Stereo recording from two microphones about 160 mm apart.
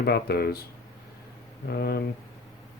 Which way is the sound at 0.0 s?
80° left.